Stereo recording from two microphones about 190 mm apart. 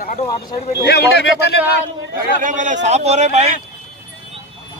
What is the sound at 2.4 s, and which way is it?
A man's voice, 40° right (ahead or behind).